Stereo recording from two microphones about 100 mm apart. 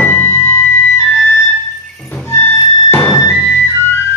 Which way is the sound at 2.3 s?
25° left (ahead or behind).